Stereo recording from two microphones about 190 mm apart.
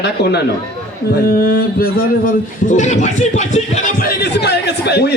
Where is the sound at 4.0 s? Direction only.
60° left (ahead or behind).